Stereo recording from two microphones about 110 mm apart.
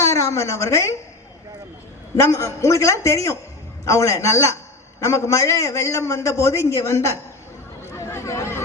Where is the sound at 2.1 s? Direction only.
25° left (ahead or behind).